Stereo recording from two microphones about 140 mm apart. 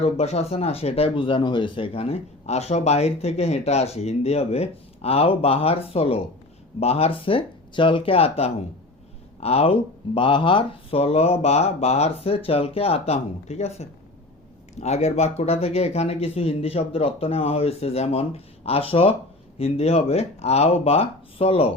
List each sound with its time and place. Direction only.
0.0 s speech: 50° left (ahead or behind)